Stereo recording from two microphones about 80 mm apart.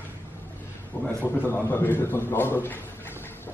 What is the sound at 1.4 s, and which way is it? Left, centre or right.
A man's voice, left.